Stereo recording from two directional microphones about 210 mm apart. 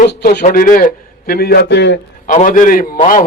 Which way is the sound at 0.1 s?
50° left (ahead or behind).